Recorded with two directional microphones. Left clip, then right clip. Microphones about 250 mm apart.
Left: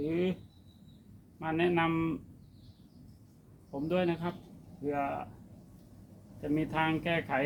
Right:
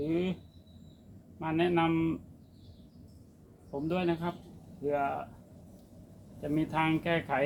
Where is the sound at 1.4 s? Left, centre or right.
Right.